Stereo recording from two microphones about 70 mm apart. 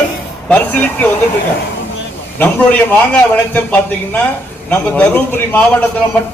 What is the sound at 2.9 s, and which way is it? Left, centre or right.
A man's voice, left.